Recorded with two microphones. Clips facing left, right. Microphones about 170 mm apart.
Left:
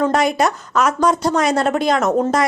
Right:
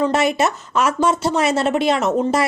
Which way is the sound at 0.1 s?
5° right (ahead or behind).